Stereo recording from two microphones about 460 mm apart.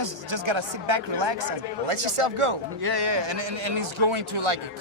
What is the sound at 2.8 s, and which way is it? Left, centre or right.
A man's voice, right.